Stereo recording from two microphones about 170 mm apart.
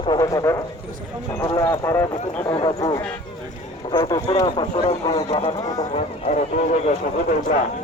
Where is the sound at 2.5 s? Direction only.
30° left (ahead or behind).